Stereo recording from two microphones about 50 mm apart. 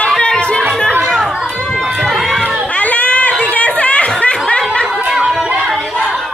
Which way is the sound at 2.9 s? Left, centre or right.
Left.